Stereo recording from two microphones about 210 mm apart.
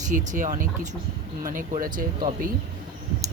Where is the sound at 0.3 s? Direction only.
35° right (ahead or behind).